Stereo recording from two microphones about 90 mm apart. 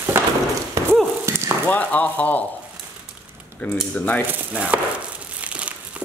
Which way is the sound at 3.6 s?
25° left (ahead or behind).